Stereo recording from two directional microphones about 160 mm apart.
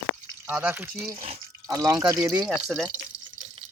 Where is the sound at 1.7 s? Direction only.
20° right (ahead or behind).